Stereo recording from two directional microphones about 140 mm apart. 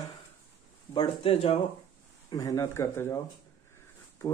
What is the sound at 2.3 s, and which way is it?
Speech, 25° left (ahead or behind).